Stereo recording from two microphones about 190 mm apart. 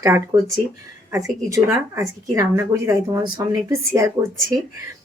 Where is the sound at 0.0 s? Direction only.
15° right (ahead or behind).